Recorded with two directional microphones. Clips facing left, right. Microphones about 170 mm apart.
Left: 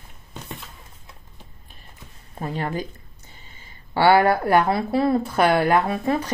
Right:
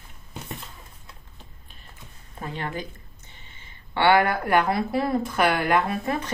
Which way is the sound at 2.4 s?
40° left (ahead or behind).